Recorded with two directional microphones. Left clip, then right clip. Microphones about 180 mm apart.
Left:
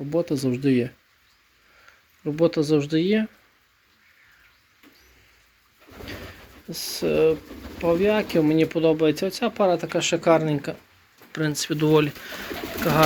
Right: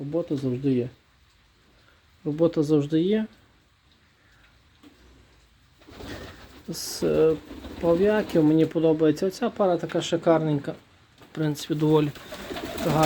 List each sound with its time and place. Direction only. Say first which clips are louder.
0.1 s speech: left 3 dB; 10° left (ahead or behind)
2.2 s speech: left 2 dB; 10° right (ahead or behind)
6.7 s speech: left 1 dB; 35° right (ahead or behind); by 12.1 s 5° right (ahead or behind)